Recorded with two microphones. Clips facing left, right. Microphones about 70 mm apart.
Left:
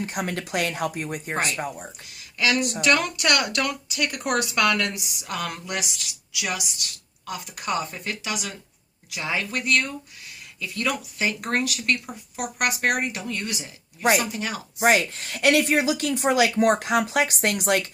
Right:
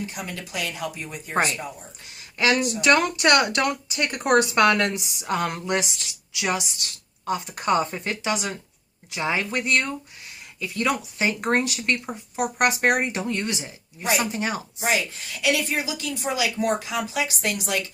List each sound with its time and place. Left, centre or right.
0.0 s speech: left
2.0 s a sound: right
2.8 s speech: right
14.8 s speech: left